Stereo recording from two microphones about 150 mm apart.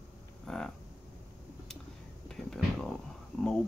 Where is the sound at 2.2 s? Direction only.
5° left (ahead or behind).